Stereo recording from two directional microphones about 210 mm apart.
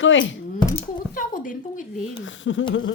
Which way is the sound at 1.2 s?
40° left (ahead or behind).